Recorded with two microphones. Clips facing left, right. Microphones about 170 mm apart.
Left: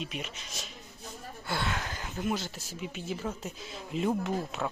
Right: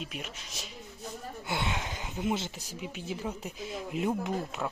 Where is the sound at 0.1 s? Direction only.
5° right (ahead or behind).